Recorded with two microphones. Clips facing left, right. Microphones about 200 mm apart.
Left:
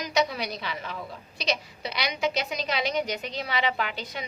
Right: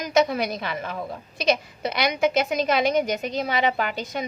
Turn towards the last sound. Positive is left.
turn(degrees=-45)  # may be behind; listen again after turning